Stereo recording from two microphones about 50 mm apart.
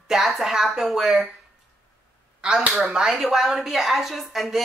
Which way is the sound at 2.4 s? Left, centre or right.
Right.